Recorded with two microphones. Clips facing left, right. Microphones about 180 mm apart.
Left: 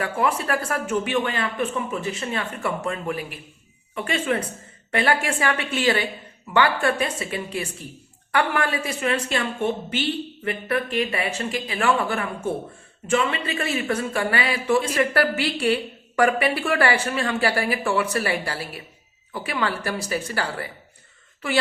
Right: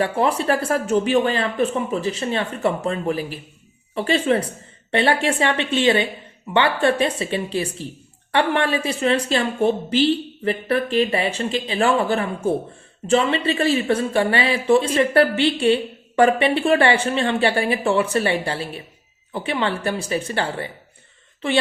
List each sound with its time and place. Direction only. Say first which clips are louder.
0.0 s a woman's voice: right 4 dB; 30° right (ahead or behind)